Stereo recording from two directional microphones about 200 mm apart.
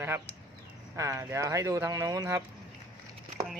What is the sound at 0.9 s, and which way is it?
Speech, 15° right (ahead or behind).